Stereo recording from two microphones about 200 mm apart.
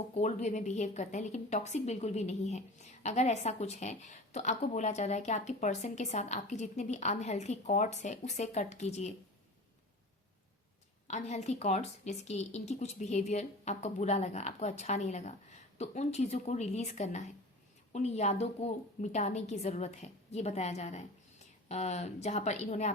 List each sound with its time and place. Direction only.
0.1 s a woman's voice: 35° left (ahead or behind)
11.1 s a woman's voice: 35° left (ahead or behind)